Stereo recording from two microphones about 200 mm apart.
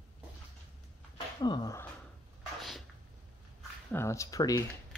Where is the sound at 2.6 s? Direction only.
Centre (ahead or behind).